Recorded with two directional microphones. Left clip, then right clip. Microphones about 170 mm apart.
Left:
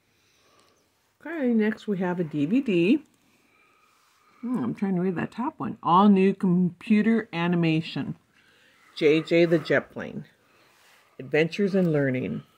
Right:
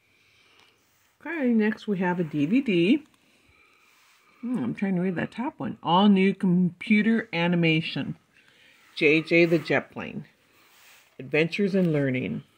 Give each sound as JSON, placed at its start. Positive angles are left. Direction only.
{"t": 1.2, "sound": "speech", "side_deg": -20}
{"t": 4.5, "sound": "speech", "side_deg": -10}